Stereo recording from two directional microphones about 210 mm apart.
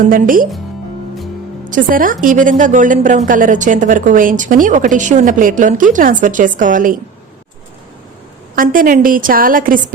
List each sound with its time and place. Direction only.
0.0 s a woman's voice: 40° right (ahead or behind)
1.7 s a woman's voice: 40° right (ahead or behind)
8.5 s a woman's voice: 40° right (ahead or behind)